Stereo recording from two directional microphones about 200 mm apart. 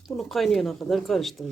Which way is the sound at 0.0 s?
Centre (ahead or behind).